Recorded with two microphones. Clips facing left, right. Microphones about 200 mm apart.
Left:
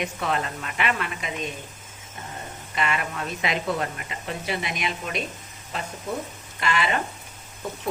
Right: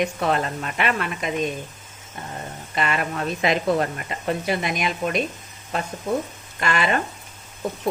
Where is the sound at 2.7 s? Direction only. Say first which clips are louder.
Right 3 dB; 40° right (ahead or behind).